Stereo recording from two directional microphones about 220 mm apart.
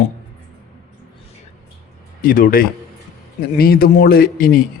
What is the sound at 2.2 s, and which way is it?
A man's voice, 40° left (ahead or behind).